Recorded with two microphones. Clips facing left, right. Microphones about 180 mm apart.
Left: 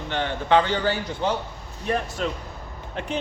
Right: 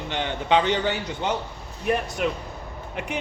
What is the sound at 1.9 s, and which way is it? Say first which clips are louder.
Speech: right 2 dB; 15° right (ahead or behind).